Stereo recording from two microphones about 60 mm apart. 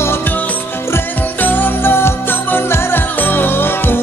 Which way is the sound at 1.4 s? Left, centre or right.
Left.